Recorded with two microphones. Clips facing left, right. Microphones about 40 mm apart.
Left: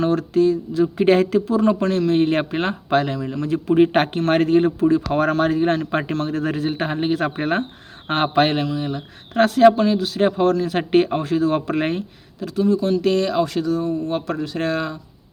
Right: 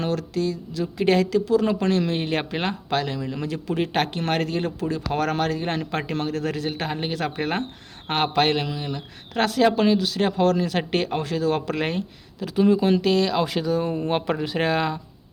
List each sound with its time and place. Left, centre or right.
0.0 s a sound: left
1.8 s speech: centre
2.5 s speech: centre
3.9 s a sound: left
4.6 s speech: centre
5.6 s speech: centre
5.9 s speech: centre
12.6 s speech: right
13.1 s speech: centre
13.8 s speech: right
14.3 s speech: centre